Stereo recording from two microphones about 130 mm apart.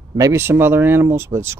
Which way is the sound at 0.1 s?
25° right (ahead or behind).